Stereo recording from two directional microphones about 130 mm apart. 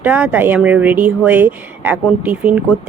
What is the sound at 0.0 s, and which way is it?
Speech, 10° right (ahead or behind).